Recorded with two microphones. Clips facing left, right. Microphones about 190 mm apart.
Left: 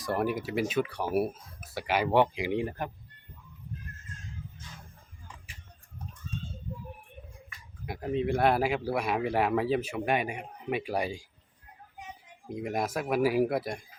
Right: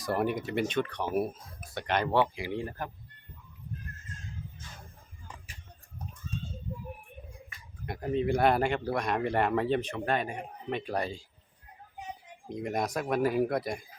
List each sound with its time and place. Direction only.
0.0 s speech: centre (ahead or behind)
2.2 s speech: 20° left (ahead or behind)
7.9 s speech: centre (ahead or behind)
12.5 s speech: 5° left (ahead or behind)